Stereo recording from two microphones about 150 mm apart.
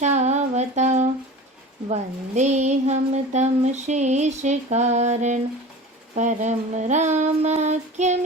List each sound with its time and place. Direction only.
0.0 s humming: 50° right (ahead or behind)
1.9 s speech: 50° right (ahead or behind)